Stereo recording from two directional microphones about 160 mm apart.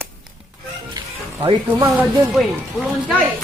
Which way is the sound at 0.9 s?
30° right (ahead or behind).